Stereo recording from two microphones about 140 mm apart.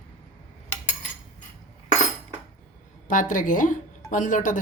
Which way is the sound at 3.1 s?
70° left (ahead or behind).